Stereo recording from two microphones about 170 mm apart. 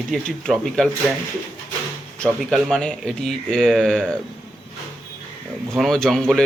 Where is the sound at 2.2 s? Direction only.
Centre (ahead or behind).